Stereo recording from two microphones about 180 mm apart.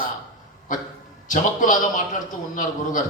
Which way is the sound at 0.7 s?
45° left (ahead or behind).